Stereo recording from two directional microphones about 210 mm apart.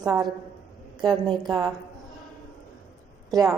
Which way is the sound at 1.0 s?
20° right (ahead or behind).